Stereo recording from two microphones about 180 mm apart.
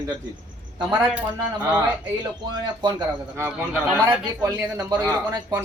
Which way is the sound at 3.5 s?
5° right (ahead or behind).